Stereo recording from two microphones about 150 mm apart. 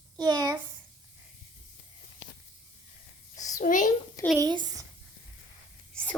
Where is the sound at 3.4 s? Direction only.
55° left (ahead or behind).